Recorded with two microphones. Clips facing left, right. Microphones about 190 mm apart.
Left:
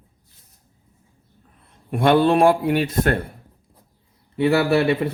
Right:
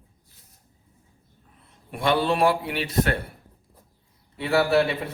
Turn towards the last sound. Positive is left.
turn(degrees=60)  # may be behind; listen again after turning